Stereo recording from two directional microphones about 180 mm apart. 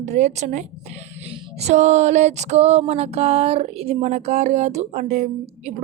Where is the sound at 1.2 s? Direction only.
35° right (ahead or behind).